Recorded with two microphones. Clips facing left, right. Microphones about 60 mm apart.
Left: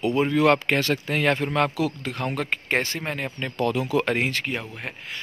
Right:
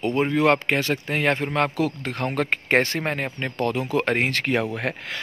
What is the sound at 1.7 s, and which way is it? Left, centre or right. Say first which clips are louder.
Speech: right 2 dB; right.